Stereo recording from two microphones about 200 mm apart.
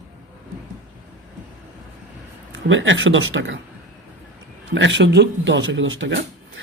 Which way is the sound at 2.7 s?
70° right (ahead or behind).